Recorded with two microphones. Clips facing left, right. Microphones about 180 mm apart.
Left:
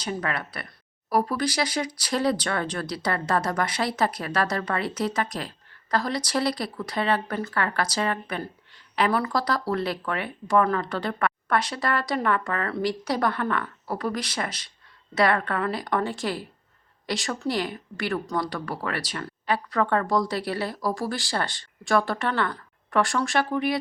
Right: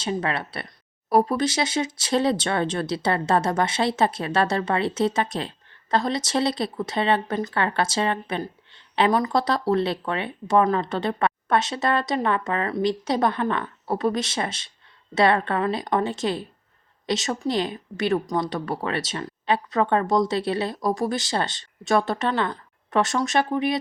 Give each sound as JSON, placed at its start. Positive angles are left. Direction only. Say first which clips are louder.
{"t": 0.0, "sound": "speech", "louder": "right 3 dB", "side_deg": -25}